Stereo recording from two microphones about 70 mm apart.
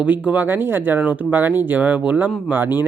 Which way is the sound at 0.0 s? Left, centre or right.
Right.